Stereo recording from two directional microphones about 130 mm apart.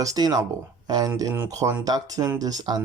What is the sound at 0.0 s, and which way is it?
Speech, 30° right (ahead or behind).